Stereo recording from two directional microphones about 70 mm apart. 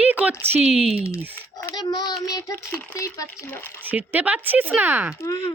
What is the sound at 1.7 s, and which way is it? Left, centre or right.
Child singing, left.